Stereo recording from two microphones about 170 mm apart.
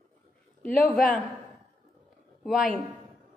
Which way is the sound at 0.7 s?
55° left (ahead or behind).